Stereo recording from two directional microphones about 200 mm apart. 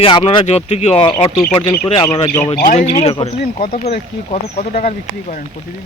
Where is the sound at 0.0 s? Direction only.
25° left (ahead or behind).